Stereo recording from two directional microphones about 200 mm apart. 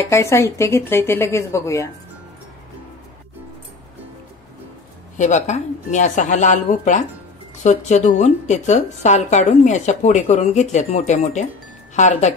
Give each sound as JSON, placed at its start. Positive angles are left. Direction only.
{"t": 0.0, "sound": "speech", "side_deg": 15}
{"t": 5.1, "sound": "a woman's voice", "side_deg": 35}